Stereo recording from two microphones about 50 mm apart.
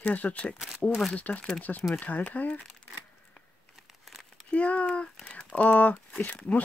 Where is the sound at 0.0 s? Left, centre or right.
Left.